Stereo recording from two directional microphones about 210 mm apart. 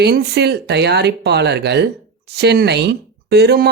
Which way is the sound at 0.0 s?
50° right (ahead or behind).